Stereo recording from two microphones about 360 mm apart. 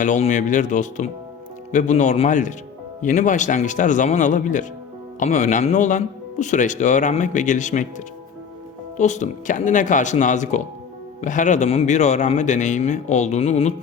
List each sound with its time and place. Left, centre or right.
0.0 s speech: left